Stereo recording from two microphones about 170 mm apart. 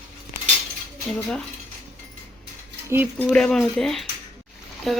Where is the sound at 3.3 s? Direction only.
Centre (ahead or behind).